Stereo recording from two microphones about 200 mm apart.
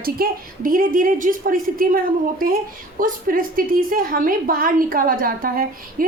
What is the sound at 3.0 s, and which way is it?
A woman's voice, 45° right (ahead or behind).